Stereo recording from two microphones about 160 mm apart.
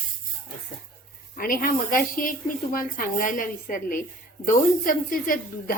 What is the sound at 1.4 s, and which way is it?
A woman's voice, 65° left (ahead or behind).